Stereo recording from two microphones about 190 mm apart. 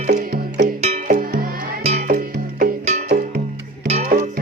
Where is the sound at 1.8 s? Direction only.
35° right (ahead or behind).